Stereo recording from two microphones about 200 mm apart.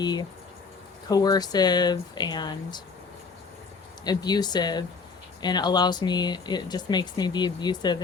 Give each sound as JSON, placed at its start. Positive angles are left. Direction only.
{"t": 0.0, "sound": "speech", "side_deg": 20}
{"t": 4.0, "sound": "speech", "side_deg": 20}